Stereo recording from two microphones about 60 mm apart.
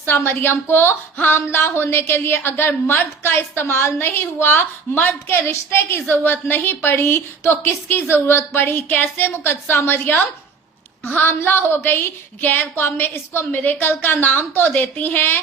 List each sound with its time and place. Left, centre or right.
0.0 s a woman's voice: left
13.6 s a woman's voice: left